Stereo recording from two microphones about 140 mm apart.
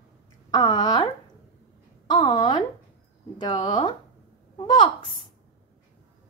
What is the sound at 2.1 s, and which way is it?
Speech, 35° left (ahead or behind).